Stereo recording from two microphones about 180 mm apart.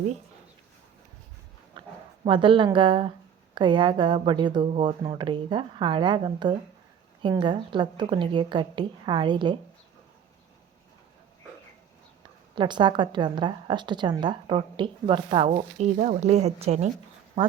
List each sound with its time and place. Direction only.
1.7 s a sound: 25° right (ahead or behind)
2.2 s a woman's voice: 25° right (ahead or behind)
12.5 s a woman's voice: 25° right (ahead or behind)